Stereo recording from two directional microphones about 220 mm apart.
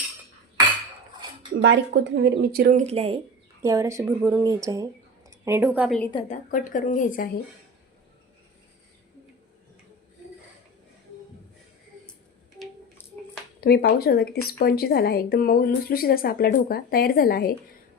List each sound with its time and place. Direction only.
1.6 s speech: 50° right (ahead or behind); by 3.2 s 25° right (ahead or behind)
3.6 s speech: 15° right (ahead or behind)
6.1 s a woman's voice: 35° left (ahead or behind)
13.6 s speech: 45° left (ahead or behind)